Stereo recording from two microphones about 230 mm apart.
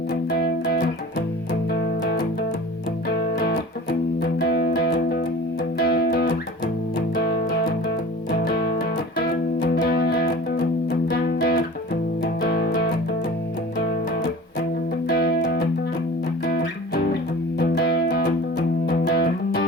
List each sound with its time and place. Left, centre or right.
0.3 s music: left
4.2 s music: left
15.0 s music: left